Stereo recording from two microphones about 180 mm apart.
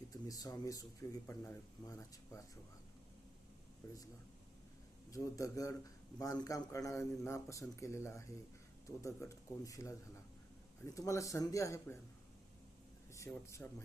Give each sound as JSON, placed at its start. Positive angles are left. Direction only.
{"t": 0.1, "sound": "speech", "side_deg": 20}
{"t": 3.8, "sound": "a man's voice", "side_deg": 15}
{"t": 5.1, "sound": "a man's voice", "side_deg": 20}
{"t": 13.1, "sound": "a man's voice", "side_deg": 15}